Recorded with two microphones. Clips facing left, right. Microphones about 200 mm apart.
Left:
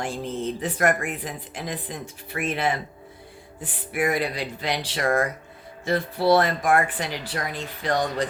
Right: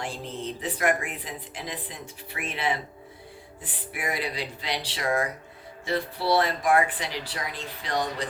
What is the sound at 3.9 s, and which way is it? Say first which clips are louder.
Speech: left 7 dB; 50° left (ahead or behind).